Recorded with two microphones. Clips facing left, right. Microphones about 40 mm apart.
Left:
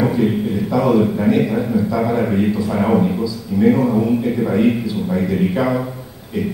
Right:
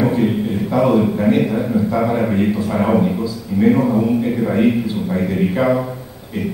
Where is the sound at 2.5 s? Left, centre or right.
Right.